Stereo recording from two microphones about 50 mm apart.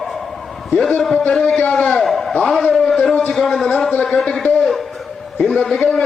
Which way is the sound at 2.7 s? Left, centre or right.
Centre.